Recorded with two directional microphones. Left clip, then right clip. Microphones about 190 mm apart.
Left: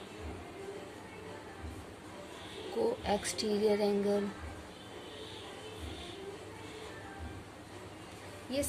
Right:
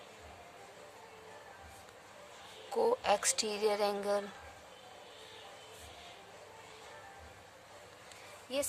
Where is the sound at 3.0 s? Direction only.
45° right (ahead or behind).